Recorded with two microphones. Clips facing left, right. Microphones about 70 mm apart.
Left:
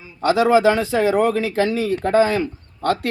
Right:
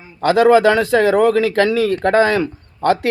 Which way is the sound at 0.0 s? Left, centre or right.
Right.